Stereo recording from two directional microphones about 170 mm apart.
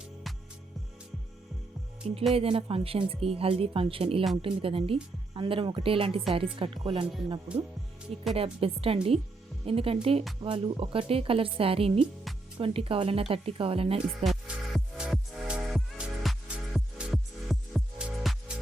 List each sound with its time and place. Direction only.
2.3 s speech: 35° right (ahead or behind)
8.4 s speech: 35° right (ahead or behind)
14.3 s music: 5° right (ahead or behind)